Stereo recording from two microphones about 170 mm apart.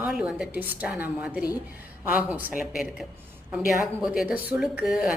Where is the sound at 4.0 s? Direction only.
5° right (ahead or behind).